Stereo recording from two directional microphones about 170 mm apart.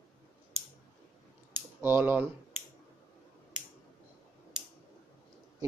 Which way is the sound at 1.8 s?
10° right (ahead or behind).